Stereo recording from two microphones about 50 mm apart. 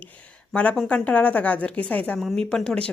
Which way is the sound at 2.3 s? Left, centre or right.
Centre.